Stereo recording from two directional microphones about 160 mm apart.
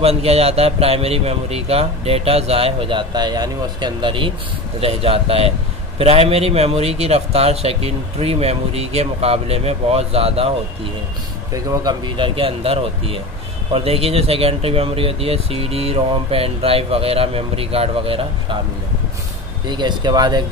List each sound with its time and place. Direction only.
0.0 s speech: 40° right (ahead or behind)
11.5 s speech: 20° right (ahead or behind)
19.7 s speech: 25° right (ahead or behind)